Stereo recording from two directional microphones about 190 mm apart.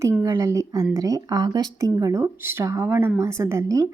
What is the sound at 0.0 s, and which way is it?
A woman's voice, 15° right (ahead or behind).